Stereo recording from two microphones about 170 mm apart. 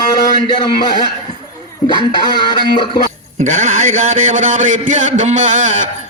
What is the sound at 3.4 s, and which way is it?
A man's voice, 50° right (ahead or behind).